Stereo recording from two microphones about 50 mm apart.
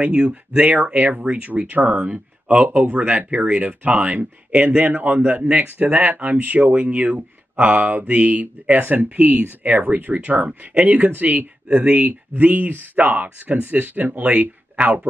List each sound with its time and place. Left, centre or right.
0.0 s speech: right
2.0 s speech: right